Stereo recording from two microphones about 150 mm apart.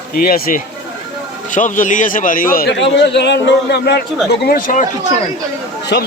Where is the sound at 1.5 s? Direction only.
60° left (ahead or behind).